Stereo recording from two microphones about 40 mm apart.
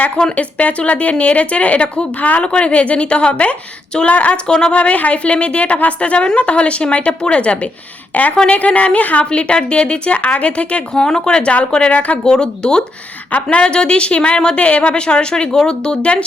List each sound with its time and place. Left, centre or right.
0.3 s a woman's voice: left
4.4 s a woman's voice: left
4.7 s a woman's voice: left
8.1 s a woman's voice: left
9.3 s a woman's voice: left
10.9 s a woman's voice: centre
13.3 s a woman's voice: left